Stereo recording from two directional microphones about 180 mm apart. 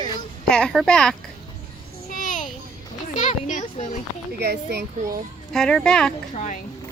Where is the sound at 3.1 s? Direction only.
45° left (ahead or behind).